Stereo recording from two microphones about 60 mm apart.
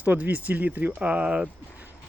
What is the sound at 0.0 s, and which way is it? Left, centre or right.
Speech, right.